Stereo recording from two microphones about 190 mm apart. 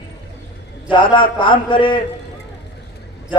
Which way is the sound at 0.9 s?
25° left (ahead or behind).